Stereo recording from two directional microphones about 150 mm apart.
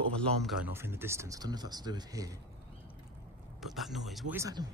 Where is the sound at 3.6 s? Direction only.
Centre (ahead or behind).